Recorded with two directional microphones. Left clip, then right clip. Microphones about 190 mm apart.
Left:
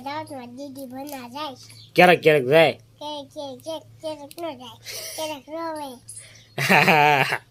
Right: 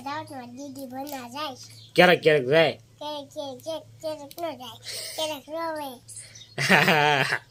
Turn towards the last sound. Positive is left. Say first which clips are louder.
# left 4 dB
turn(degrees=5)  # may be behind; listen again after turning